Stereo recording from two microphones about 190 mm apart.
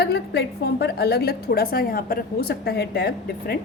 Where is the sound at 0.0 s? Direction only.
60° left (ahead or behind).